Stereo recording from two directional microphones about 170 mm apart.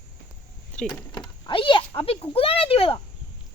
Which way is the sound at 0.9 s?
25° left (ahead or behind).